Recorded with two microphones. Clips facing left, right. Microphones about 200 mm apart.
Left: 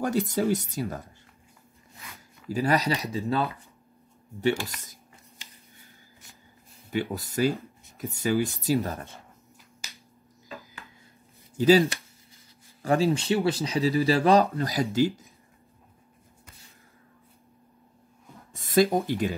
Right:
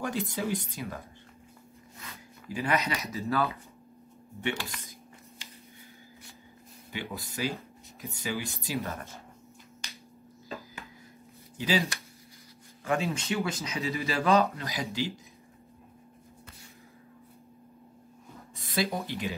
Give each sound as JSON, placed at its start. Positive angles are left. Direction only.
{"t": 0.0, "sound": "speech", "side_deg": 45}
{"t": 2.5, "sound": "speech", "side_deg": 35}
{"t": 6.9, "sound": "speech", "side_deg": 45}
{"t": 8.6, "sound": "speech", "side_deg": 30}
{"t": 9.8, "sound": "finger snapping", "side_deg": 5}
{"t": 11.5, "sound": "speech", "side_deg": 45}
{"t": 12.8, "sound": "speech", "side_deg": 35}
{"t": 18.5, "sound": "speech", "side_deg": 50}